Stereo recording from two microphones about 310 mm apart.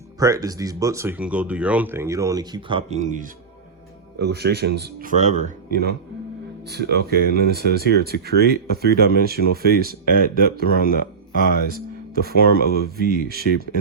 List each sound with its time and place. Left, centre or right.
0.2 s speech: centre
4.2 s speech: right
10.8 s speech: left
13.0 s speech: right